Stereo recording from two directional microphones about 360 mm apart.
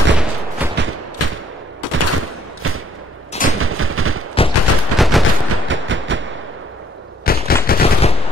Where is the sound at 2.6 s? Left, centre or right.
Right.